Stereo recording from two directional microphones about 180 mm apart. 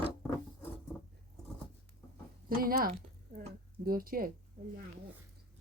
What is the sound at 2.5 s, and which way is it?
A woman's voice, 55° right (ahead or behind).